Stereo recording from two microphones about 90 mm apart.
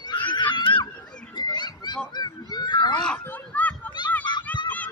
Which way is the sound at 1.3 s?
55° left (ahead or behind).